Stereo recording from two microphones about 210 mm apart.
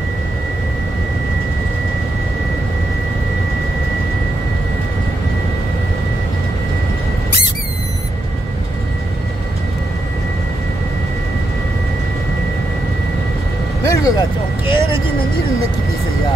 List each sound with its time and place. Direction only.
13.8 s vehicle: 15° left (ahead or behind)